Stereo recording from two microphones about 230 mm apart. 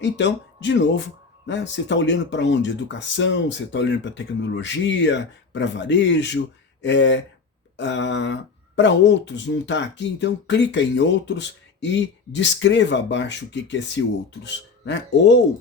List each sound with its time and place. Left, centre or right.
0.0 s speech: left